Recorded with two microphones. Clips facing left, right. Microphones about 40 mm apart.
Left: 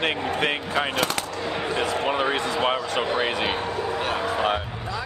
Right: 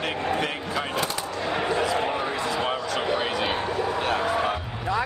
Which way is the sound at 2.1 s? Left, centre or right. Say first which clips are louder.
Left 3 dB; left.